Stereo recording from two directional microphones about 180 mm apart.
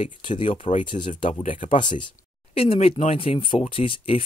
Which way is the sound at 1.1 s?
45° left (ahead or behind).